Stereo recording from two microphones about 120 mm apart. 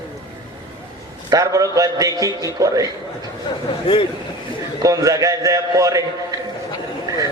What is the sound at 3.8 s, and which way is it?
Speech, 50° left (ahead or behind).